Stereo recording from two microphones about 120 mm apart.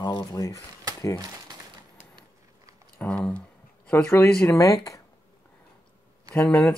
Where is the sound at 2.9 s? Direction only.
10° left (ahead or behind); by 5.0 s 25° left (ahead or behind).